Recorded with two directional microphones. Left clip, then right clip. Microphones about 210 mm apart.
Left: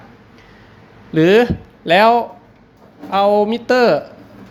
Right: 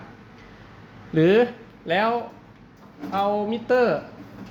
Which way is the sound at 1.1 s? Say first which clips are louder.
Left 6 dB; 25° left (ahead or behind).